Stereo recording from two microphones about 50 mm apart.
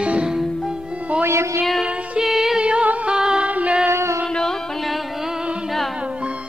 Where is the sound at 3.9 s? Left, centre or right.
Right.